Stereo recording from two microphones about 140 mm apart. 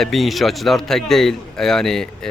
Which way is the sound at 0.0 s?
Centre (ahead or behind).